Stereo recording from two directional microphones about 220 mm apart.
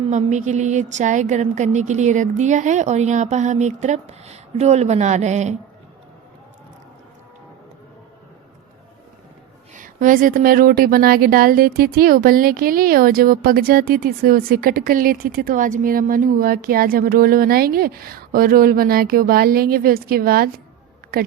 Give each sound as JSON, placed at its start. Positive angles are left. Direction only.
{"t": 0.0, "sound": "a woman's voice", "side_deg": -30}
{"t": 9.7, "sound": "a woman's voice", "side_deg": -35}